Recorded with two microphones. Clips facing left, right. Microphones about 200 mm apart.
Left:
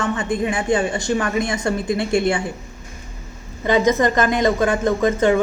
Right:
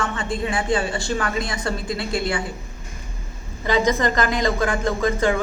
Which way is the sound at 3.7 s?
20° left (ahead or behind).